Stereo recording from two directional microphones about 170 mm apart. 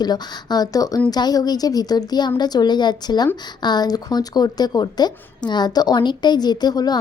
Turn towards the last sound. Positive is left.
turn(degrees=25)  # may be behind; listen again after turning